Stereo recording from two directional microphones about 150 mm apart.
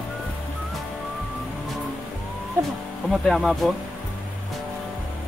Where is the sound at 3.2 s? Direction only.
Centre (ahead or behind).